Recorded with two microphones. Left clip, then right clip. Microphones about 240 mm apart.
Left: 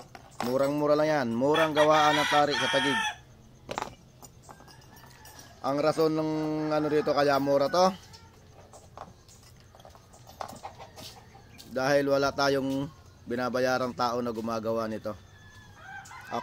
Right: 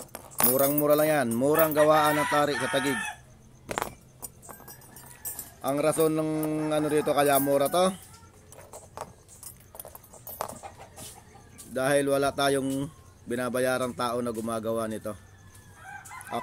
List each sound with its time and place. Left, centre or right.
0.6 s chicken: centre
3.7 s keys jangling: right
5.6 s speech: centre
11.5 s speech: centre